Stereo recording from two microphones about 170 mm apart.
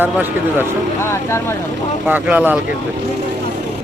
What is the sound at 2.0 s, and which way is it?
Speech, 10° right (ahead or behind).